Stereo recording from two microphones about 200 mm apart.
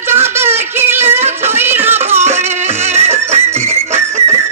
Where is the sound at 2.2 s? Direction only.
35° right (ahead or behind).